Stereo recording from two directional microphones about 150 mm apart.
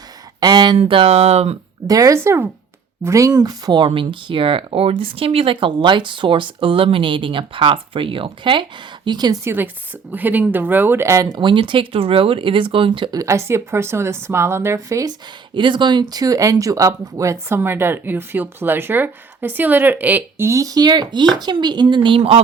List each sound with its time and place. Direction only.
0.3 s a sound: 25° right (ahead or behind)
0.8 s speech: 40° right (ahead or behind)
1.9 s speech: 20° right (ahead or behind)
15.5 s speech: 35° right (ahead or behind)